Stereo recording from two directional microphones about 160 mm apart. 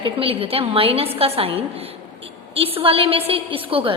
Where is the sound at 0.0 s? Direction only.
35° right (ahead or behind).